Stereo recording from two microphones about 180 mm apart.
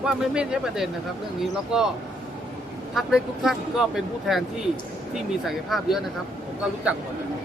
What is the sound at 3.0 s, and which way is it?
Speech, centre (ahead or behind).